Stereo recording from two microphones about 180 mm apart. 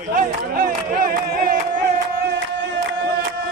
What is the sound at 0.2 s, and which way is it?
Crowd, 50° right (ahead or behind).